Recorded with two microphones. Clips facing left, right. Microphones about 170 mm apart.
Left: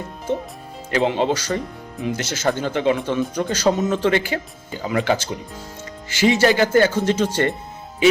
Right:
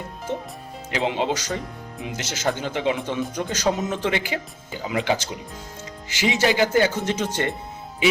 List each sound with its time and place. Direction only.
0.9 s speech: 15° right (ahead or behind)